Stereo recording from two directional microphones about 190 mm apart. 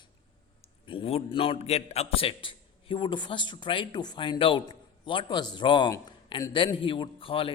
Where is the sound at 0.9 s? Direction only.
30° left (ahead or behind).